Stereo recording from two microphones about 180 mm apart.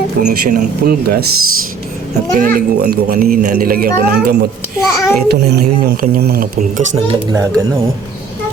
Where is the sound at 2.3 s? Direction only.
55° right (ahead or behind).